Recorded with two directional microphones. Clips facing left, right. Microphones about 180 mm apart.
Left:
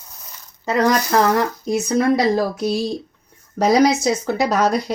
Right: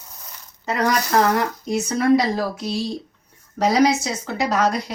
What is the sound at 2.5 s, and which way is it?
Speech, 45° left (ahead or behind).